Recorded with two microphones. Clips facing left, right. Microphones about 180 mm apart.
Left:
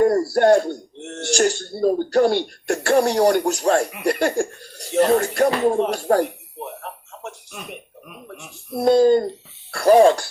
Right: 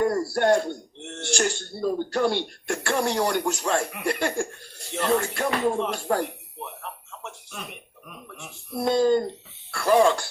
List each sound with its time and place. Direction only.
0.0 s speech: 40° left (ahead or behind)
5.7 s a sound: 40° left (ahead or behind)
8.7 s speech: 40° left (ahead or behind)